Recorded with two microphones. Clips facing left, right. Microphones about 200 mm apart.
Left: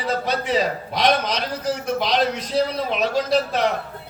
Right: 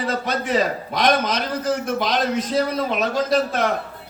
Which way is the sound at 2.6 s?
50° right (ahead or behind).